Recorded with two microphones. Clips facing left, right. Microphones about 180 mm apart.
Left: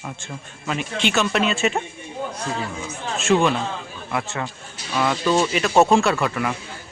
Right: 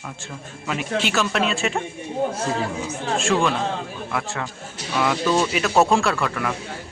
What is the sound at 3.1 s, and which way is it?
Speech, 5° left (ahead or behind).